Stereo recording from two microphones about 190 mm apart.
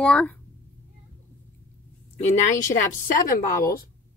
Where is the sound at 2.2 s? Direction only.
40° left (ahead or behind).